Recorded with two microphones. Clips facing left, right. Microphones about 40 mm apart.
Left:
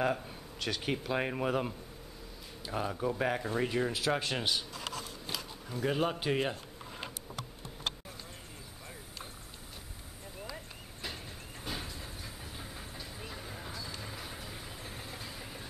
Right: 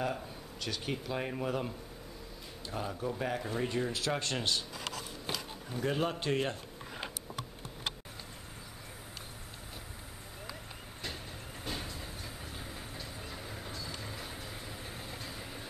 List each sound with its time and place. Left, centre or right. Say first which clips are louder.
0.0 s speech: left 4 dB; centre
1.1 s speech: left 3 dB; left
5.8 s speech: left 1 dB; centre
11.6 s train: even; centre
13.3 s vehicle: even; centre